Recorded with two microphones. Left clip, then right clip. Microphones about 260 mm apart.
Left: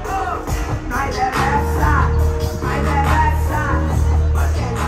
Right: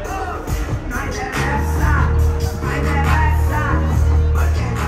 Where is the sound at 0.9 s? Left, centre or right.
Left.